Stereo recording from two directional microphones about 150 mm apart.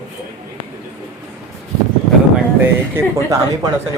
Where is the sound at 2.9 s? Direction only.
20° right (ahead or behind).